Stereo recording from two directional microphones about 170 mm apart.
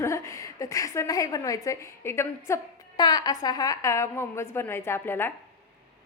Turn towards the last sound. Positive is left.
turn(degrees=15)  # may be behind; listen again after turning